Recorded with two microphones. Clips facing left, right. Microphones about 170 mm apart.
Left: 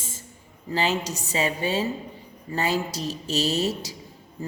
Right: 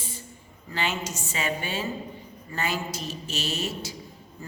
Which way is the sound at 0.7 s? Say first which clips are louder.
Left 5 dB; 35° left (ahead or behind).